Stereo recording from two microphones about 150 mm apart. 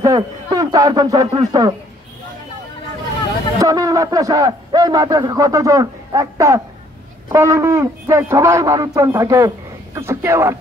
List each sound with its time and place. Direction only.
0.0 s a man's voice: 25° right (ahead or behind)
3.5 s a man's voice: 25° right (ahead or behind)